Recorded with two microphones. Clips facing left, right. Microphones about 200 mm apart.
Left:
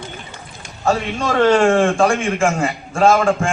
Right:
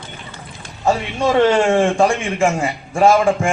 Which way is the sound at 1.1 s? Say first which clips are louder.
Right 1 dB; 20° right (ahead or behind).